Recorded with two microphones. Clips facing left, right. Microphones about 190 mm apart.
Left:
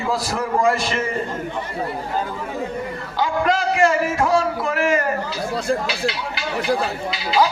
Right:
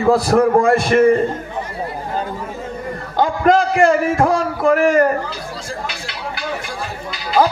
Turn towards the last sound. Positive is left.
turn(degrees=-50)  # may be behind; listen again after turning